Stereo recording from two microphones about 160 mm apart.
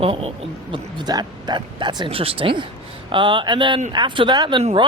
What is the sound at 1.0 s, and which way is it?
Speech, 25° right (ahead or behind).